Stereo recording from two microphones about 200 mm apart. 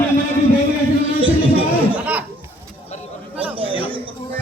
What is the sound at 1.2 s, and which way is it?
Chatter, 25° right (ahead or behind).